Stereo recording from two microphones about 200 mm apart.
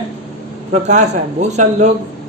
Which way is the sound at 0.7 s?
35° right (ahead or behind).